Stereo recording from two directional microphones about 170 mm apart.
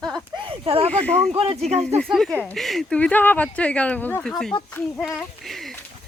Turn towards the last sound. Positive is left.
turn(degrees=0)  # may be behind; listen again after turning